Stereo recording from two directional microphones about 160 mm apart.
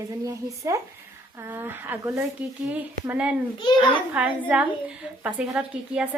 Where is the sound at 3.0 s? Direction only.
10° right (ahead or behind).